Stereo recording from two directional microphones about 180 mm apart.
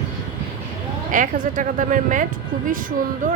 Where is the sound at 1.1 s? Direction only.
45° right (ahead or behind).